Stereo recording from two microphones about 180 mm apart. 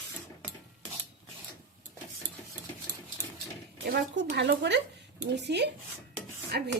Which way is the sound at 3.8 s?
65° right (ahead or behind).